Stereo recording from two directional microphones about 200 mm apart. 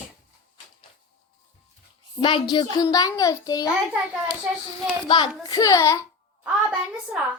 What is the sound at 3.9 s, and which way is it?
Speech, 5° right (ahead or behind).